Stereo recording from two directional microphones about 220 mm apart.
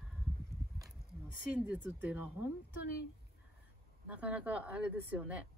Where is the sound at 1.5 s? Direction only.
5° right (ahead or behind).